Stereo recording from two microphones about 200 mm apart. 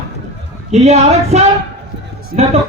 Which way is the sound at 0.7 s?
35° right (ahead or behind).